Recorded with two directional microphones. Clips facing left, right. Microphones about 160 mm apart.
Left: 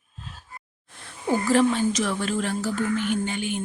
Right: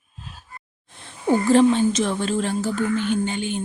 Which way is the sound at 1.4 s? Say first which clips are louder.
Right 4 dB; 25° right (ahead or behind).